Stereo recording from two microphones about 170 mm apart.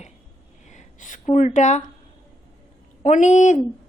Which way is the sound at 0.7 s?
45° left (ahead or behind).